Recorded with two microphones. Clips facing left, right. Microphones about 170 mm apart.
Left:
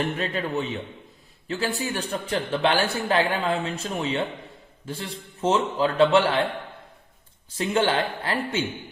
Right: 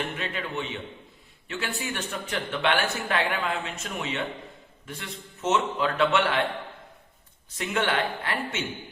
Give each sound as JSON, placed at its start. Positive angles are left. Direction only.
{"t": 0.2, "sound": "speech", "side_deg": 40}
{"t": 7.5, "sound": "speech", "side_deg": 30}